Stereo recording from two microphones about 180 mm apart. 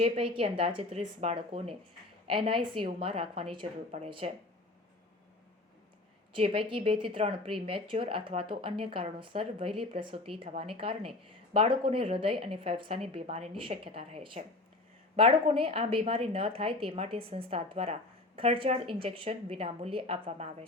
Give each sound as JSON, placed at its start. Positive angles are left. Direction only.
{"t": 0.3, "sound": "a woman's voice", "side_deg": -30}
{"t": 6.3, "sound": "a woman's voice", "side_deg": -30}